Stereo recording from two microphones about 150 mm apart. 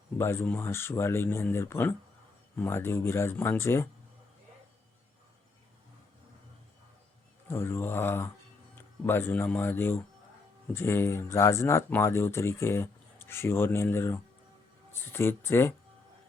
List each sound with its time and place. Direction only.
0.2 s speech: 15° left (ahead or behind)
7.5 s speech: 15° left (ahead or behind)